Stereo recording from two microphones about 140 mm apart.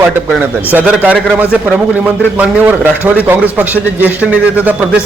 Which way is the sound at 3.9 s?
10° right (ahead or behind).